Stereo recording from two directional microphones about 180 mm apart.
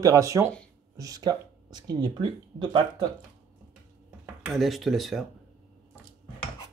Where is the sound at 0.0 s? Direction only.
20° right (ahead or behind).